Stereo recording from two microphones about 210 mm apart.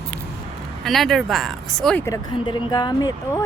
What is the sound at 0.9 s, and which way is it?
Speech, centre (ahead or behind).